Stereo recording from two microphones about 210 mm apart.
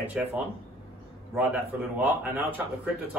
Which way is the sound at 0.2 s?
5° right (ahead or behind).